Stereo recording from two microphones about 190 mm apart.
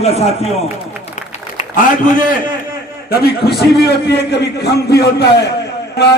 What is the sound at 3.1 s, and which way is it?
A man's voice, 60° left (ahead or behind).